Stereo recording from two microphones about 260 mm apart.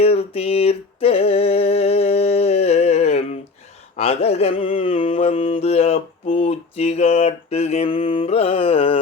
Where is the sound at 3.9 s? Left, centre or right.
Left.